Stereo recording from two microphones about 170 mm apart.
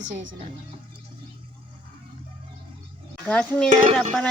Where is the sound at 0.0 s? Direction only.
45° right (ahead or behind).